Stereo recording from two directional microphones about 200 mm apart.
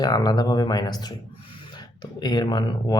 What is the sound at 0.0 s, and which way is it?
Speech, 20° left (ahead or behind).